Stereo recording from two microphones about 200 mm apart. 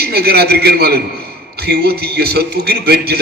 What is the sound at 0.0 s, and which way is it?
A man's voice, 50° right (ahead or behind).